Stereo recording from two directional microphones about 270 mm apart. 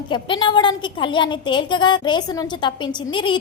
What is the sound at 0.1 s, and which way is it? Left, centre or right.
A woman's voice, centre.